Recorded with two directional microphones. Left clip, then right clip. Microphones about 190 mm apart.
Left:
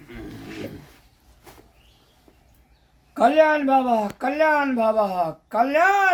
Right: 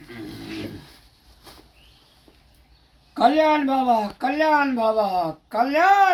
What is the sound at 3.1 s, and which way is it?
Speech, 35° left (ahead or behind).